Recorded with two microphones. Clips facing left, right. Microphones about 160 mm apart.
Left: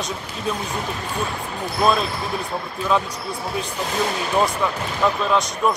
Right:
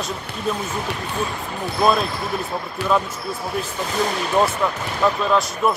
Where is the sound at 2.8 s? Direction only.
75° right (ahead or behind).